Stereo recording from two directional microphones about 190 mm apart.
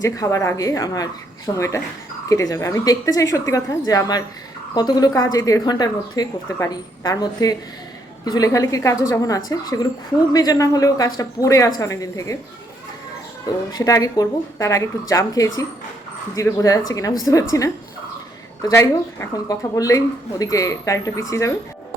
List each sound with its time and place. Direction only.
0.0 s a woman's voice: 15° left (ahead or behind)
13.7 s a woman's voice: 20° left (ahead or behind)
18.6 s a woman's voice: 15° left (ahead or behind)